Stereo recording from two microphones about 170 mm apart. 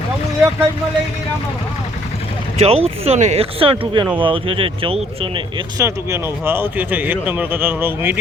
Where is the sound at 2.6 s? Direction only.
35° right (ahead or behind).